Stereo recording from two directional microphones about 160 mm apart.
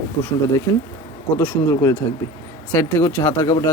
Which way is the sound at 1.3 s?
15° left (ahead or behind).